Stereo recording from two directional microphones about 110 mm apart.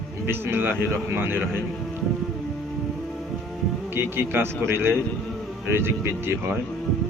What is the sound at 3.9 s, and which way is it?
A man's voice, 20° right (ahead or behind).